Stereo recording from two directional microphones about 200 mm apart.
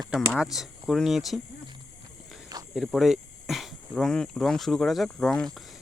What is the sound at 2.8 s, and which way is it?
Speech, centre (ahead or behind).